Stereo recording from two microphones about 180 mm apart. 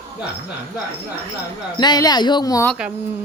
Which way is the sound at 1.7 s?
20° left (ahead or behind).